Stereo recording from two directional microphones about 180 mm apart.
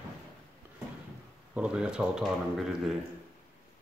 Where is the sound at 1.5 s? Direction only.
5° right (ahead or behind).